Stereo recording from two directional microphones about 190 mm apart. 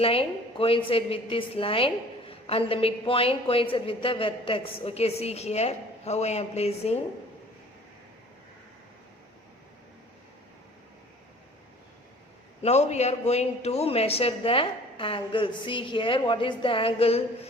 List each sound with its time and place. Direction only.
0.0 s a woman's voice: 30° left (ahead or behind)
12.6 s a woman's voice: 35° left (ahead or behind)